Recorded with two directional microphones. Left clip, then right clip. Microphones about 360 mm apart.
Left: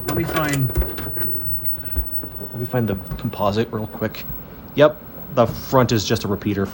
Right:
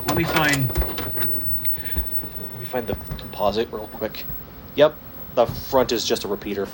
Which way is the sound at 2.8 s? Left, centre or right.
Centre.